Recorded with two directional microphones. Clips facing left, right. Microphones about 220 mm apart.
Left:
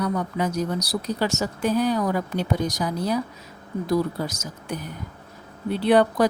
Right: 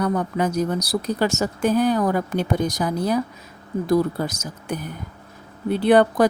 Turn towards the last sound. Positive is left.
turn(degrees=-50)  # may be behind; listen again after turning